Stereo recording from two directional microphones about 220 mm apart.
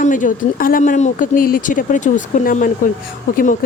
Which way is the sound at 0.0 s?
35° left (ahead or behind).